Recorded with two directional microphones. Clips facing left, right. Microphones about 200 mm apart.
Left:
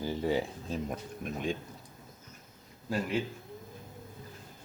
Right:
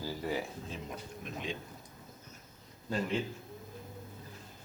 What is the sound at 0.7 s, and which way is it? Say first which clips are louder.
Speech: left 7 dB; 50° left (ahead or behind).